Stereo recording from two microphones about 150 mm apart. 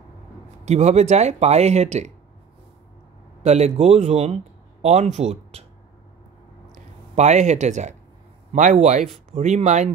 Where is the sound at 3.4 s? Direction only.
45° right (ahead or behind).